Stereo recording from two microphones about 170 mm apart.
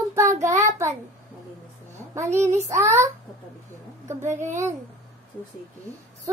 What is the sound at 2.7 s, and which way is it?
Speech, 15° right (ahead or behind).